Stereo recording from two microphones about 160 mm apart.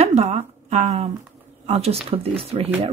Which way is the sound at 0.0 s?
40° right (ahead or behind).